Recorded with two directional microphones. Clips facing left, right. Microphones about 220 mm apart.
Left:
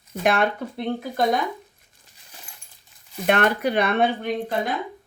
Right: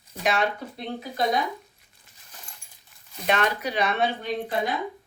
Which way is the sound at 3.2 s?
55° left (ahead or behind).